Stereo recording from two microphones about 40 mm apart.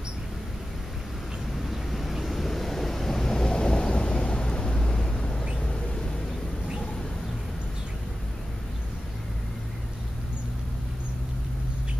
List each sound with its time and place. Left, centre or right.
1.7 s wind noise: centre; by 5.2 s left